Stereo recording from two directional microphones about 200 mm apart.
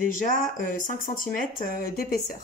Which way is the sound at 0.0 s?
40° left (ahead or behind).